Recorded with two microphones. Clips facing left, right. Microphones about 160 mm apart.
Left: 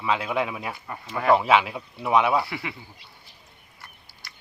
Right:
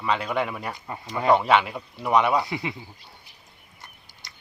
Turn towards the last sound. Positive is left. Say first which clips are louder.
# even
turn(degrees=-20)  # may be behind; listen again after turning